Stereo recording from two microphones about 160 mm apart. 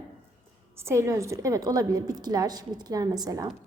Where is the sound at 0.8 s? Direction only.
15° right (ahead or behind).